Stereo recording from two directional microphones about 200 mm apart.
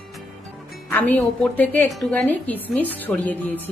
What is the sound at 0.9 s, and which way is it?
A woman's voice, 10° left (ahead or behind).